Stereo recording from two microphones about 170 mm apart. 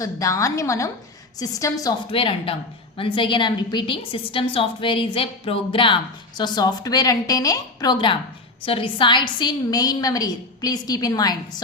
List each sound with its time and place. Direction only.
0.0 s a woman's voice: 20° left (ahead or behind)
2.0 s a woman's voice: 35° left (ahead or behind)